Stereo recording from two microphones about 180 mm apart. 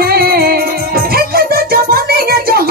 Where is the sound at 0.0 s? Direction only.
55° right (ahead or behind).